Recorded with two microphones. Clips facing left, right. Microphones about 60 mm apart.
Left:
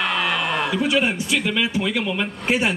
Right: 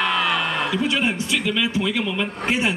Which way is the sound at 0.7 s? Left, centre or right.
Centre.